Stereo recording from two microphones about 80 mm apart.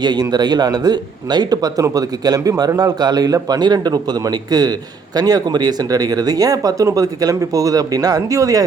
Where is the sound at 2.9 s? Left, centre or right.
Right.